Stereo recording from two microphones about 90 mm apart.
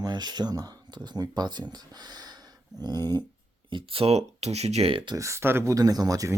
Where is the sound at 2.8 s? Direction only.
50° right (ahead or behind).